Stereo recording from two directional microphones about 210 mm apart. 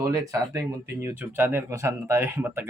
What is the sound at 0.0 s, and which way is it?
Speech, 15° right (ahead or behind).